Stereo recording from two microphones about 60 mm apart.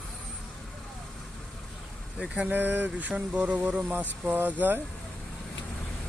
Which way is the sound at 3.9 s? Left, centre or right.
Right.